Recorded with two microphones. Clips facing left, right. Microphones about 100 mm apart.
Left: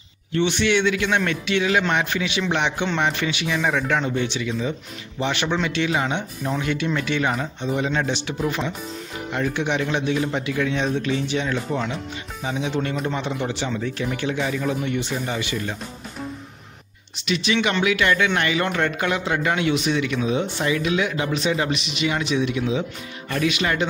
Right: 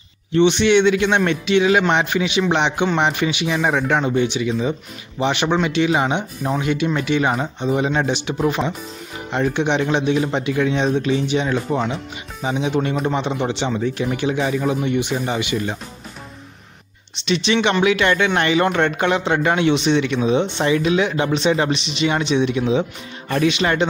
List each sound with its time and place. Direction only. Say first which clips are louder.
0.3 s a man's voice: right 6 dB; 20° right (ahead or behind)
17.2 s a man's voice: right 4 dB; 30° right (ahead or behind)